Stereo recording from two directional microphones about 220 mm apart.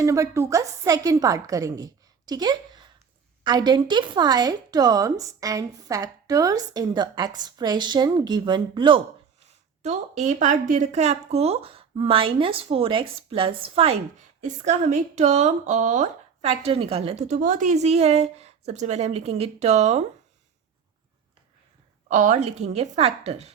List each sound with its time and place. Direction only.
0.0 s a woman's voice: 15° right (ahead or behind); by 20.1 s 30° right (ahead or behind)
22.1 s a woman's voice: 35° right (ahead or behind)